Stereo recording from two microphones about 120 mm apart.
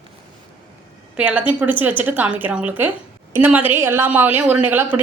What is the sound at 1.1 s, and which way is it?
A woman's voice, 10° right (ahead or behind).